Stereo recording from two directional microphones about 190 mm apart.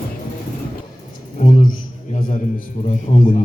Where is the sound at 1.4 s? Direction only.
45° left (ahead or behind).